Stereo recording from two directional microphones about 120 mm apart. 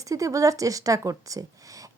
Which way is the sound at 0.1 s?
25° right (ahead or behind).